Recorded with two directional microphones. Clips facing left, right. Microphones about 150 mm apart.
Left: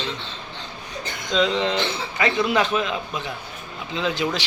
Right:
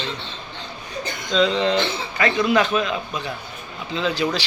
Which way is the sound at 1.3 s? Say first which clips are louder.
Right 2 dB; 15° left (ahead or behind).